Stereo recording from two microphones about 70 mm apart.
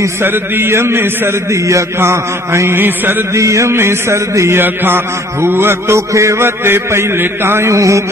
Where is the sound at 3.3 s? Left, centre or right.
Right.